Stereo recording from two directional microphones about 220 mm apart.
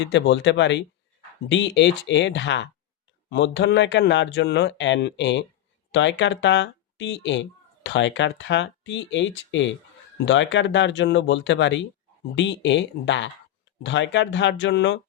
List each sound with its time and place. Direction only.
0.0 s speech: 55° left (ahead or behind)